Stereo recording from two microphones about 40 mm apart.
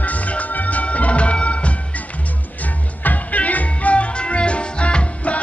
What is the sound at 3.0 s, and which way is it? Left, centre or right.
Music, left.